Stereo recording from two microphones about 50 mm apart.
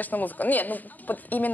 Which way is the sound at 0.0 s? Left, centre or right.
Left.